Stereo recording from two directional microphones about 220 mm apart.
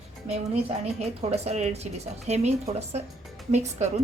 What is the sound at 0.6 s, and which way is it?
Speech, 25° right (ahead or behind).